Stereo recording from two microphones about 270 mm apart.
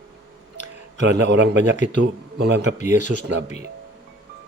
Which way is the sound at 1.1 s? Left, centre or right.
Right.